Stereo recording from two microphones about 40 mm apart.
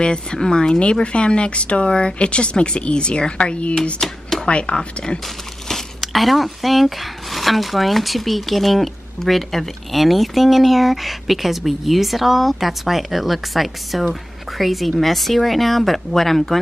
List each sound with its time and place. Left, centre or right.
0.0 s speech: left
4.0 s a sound: centre
4.5 s speech: left
5.9 s speech: centre